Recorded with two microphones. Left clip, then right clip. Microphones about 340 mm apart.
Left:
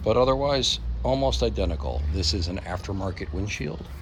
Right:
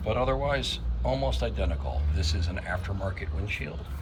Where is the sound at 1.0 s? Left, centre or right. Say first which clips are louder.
Left 4 dB; left.